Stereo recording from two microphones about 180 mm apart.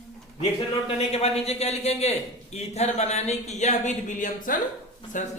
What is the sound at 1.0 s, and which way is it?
A man's voice, 35° left (ahead or behind).